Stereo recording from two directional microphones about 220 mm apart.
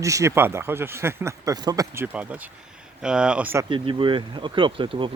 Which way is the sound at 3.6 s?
25° right (ahead or behind).